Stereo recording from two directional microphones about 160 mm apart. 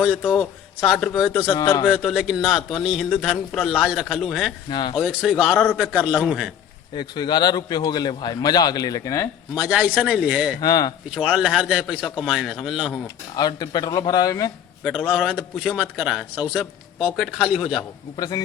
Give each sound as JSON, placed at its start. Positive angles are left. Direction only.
{"t": 0.8, "sound": "a man's voice", "side_deg": 5}
{"t": 1.5, "sound": "a man's voice", "side_deg": 15}
{"t": 1.9, "sound": "a man's voice", "side_deg": 0}
{"t": 4.7, "sound": "a man's voice", "side_deg": 30}
{"t": 4.9, "sound": "a man's voice", "side_deg": 0}
{"t": 6.9, "sound": "a man's voice", "side_deg": 25}
{"t": 9.6, "sound": "a man's voice", "side_deg": -5}
{"t": 10.6, "sound": "a man's voice", "side_deg": 25}
{"t": 11.1, "sound": "a man's voice", "side_deg": -5}
{"t": 13.3, "sound": "a man's voice", "side_deg": 25}
{"t": 14.8, "sound": "a man's voice", "side_deg": 0}
{"t": 18.2, "sound": "a man's voice", "side_deg": 25}